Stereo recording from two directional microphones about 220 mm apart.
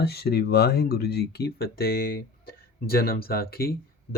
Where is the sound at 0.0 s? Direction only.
45° left (ahead or behind).